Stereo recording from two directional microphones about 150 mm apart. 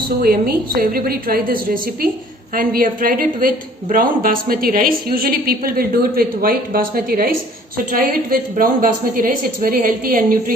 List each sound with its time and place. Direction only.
0.2 s a woman's voice: 85° right; by 10.3 s 70° right (ahead or behind)